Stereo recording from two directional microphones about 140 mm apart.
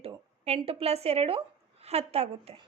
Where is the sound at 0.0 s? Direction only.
45° right (ahead or behind).